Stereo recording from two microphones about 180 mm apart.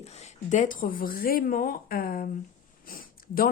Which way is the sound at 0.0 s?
35° left (ahead or behind).